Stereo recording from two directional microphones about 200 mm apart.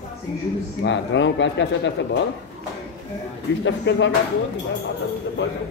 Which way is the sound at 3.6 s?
65° left (ahead or behind).